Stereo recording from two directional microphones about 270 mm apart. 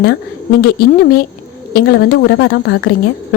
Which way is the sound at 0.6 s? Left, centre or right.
Left.